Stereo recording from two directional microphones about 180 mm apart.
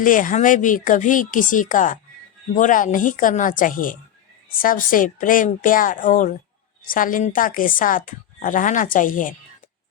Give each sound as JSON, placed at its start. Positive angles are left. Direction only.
{"t": 0.0, "sound": "a woman's voice", "side_deg": 45}